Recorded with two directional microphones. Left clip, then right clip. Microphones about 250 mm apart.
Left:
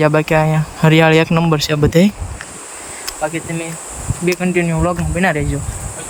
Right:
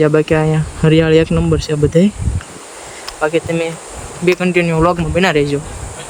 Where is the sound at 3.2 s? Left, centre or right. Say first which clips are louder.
Right 7 dB; centre.